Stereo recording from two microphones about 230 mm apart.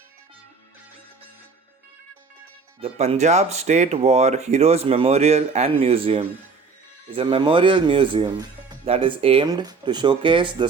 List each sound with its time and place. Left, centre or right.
2.8 s speech: right